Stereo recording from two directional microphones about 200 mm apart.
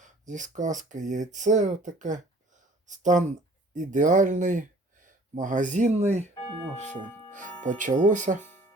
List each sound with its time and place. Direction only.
0.0 s speech: 40° right (ahead or behind)
7.6 s speech: 40° right (ahead or behind)